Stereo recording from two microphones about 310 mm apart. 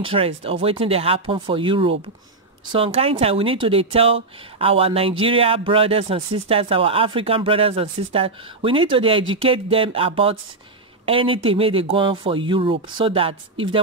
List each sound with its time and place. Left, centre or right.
0.0 s speech: centre